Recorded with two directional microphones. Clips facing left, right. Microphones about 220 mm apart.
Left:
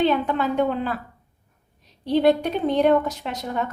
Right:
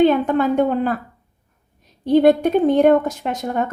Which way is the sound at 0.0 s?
50° right (ahead or behind).